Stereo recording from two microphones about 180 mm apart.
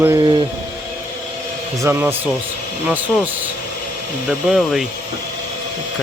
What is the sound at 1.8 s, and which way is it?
Speech, 10° right (ahead or behind).